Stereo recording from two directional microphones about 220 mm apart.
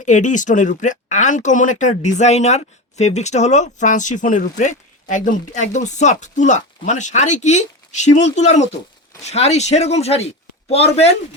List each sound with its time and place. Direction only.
0.0 s speech: 35° left (ahead or behind)